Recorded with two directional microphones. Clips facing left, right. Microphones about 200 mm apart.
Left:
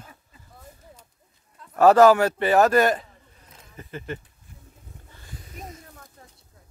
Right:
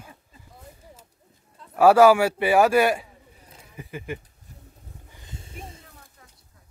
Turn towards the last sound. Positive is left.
turn(degrees=-30)  # may be behind; listen again after turning